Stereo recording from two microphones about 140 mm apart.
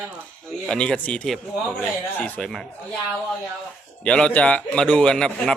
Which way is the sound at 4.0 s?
5° left (ahead or behind).